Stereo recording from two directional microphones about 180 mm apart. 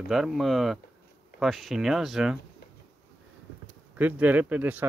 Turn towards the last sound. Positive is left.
turn(degrees=-10)  # may be behind; listen again after turning